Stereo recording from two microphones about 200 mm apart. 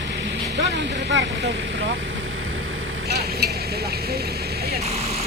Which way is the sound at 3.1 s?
55° right (ahead or behind).